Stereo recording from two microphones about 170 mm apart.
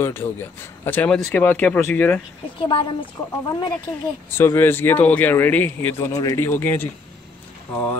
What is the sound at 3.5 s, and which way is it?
Speech, 20° left (ahead or behind).